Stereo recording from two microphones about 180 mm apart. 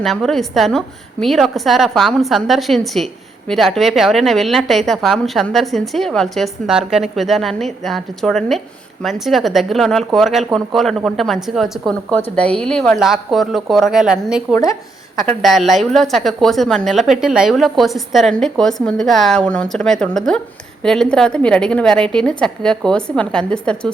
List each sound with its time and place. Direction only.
0.0 s speech: centre (ahead or behind)
14.5 s speech: 20° left (ahead or behind)
15.3 s speech: centre (ahead or behind)